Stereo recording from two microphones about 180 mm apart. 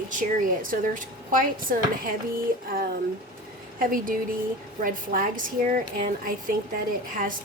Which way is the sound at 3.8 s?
50° right (ahead or behind).